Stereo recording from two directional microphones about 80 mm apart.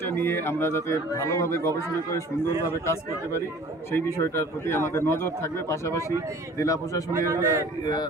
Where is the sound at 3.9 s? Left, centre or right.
Left.